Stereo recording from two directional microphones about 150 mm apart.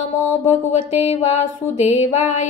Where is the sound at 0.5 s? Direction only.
45° left (ahead or behind).